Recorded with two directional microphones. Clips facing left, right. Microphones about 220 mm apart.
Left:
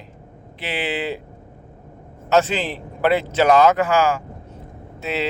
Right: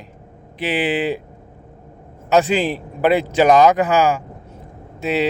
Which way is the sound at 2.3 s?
15° right (ahead or behind).